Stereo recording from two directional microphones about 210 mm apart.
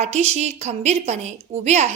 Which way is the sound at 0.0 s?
30° right (ahead or behind).